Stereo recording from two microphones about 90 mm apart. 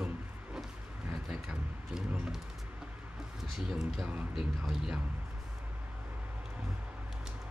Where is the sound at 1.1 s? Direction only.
5° right (ahead or behind).